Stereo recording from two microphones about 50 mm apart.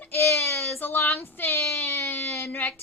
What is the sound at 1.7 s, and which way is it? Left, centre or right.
Speech, left.